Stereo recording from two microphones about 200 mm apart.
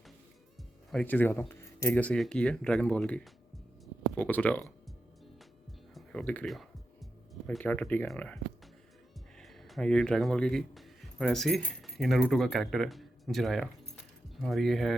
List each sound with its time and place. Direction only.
0.9 s speech: 5° left (ahead or behind)
4.2 s speech: 5° left (ahead or behind)
5.9 s music: centre (ahead or behind)
9.4 s speech: centre (ahead or behind)